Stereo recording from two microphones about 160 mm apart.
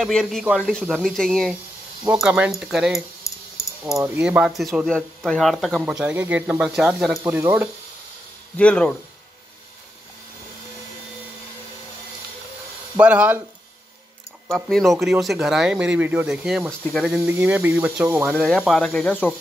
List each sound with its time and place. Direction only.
0.0 s speech: 5° left (ahead or behind)
3.3 s a sound: 20° left (ahead or behind)
4.0 s speech: 10° right (ahead or behind)
8.5 s speech: 10° left (ahead or behind)
12.9 s speech: 10° right (ahead or behind)
14.5 s speech: centre (ahead or behind)
18.4 s speech: centre (ahead or behind)